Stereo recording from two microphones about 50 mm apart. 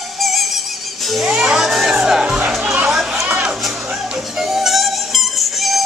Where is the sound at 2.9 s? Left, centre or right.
Centre.